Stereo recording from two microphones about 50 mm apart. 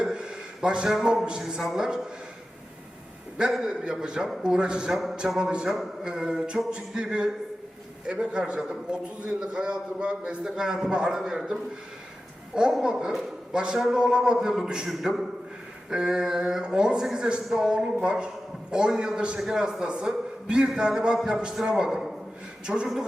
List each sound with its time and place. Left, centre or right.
0.0 s a sound: centre
0.9 s a man's voice: centre
4.0 s a man's voice: centre
12.8 s a man's voice: centre
13.7 s a man's voice: centre